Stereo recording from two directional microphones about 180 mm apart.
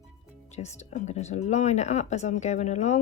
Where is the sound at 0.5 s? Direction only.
40° left (ahead or behind).